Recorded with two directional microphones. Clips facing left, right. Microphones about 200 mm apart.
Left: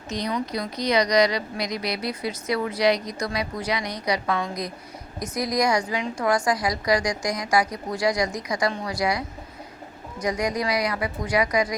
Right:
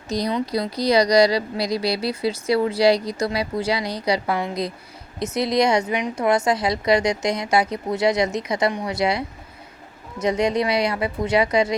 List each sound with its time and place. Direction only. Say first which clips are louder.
0.1 s a woman's voice: right 4 dB; 35° right (ahead or behind)